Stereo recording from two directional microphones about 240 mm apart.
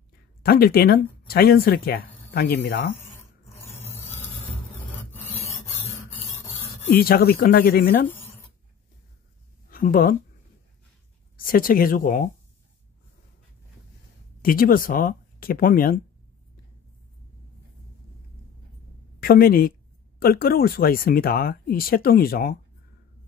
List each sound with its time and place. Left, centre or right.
0.4 s speech: left
7.0 s speech: left
9.7 s speech: left
11.3 s speech: left
14.4 s speech: left
19.1 s a woman's voice: left